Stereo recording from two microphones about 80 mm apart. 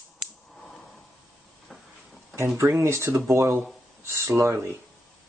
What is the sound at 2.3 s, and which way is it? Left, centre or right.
Speech, right.